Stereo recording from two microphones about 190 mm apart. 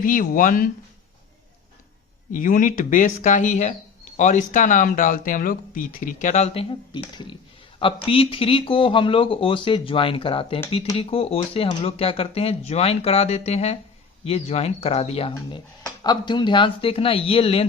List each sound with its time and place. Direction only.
0.0 s speech: 45° left (ahead or behind)
2.3 s speech: 45° left (ahead or behind)